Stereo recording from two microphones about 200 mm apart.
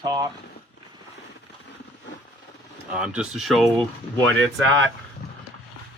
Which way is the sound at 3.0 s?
5° right (ahead or behind).